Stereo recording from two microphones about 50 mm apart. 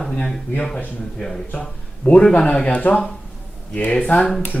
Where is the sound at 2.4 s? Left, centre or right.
Left.